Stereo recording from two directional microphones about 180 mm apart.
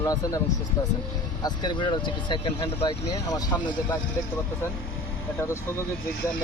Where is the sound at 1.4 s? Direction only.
25° left (ahead or behind).